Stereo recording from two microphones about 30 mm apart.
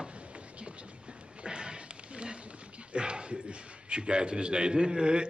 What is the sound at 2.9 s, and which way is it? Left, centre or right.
A man's voice, right.